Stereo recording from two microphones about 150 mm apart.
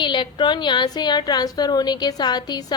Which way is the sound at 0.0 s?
30° left (ahead or behind).